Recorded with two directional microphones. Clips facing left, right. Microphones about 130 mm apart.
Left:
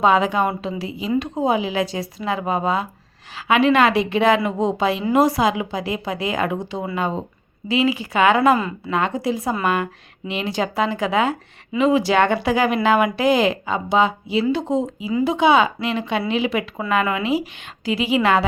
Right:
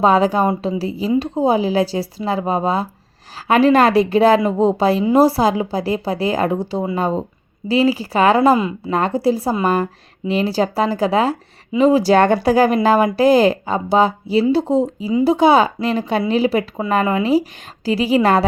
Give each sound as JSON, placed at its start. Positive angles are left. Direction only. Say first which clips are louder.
{"t": 0.0, "sound": "speech", "louder": "right 3 dB", "side_deg": -35}